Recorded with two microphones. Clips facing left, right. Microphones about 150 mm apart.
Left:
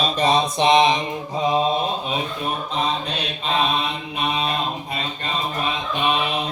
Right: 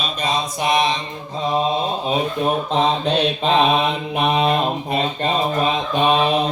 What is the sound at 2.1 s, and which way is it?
Speech, 35° right (ahead or behind).